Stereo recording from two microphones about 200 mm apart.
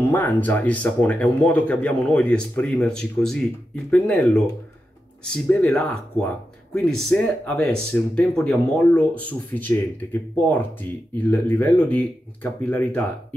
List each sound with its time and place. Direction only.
0.0 s speech: 10° left (ahead or behind)